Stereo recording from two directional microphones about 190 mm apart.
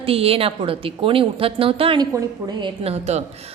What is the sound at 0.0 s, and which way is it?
A woman's voice, 30° right (ahead or behind).